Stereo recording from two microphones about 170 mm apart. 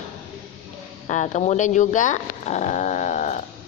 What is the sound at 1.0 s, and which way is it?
Speech, 45° left (ahead or behind).